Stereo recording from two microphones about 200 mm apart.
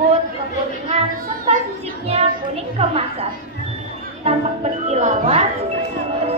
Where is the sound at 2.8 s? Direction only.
30° right (ahead or behind).